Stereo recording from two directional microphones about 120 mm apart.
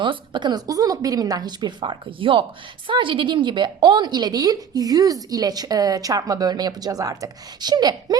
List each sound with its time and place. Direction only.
0.0 s a woman's voice: 40° right (ahead or behind)